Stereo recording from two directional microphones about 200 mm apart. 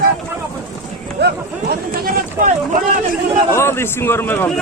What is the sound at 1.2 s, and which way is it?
Speech, 45° right (ahead or behind).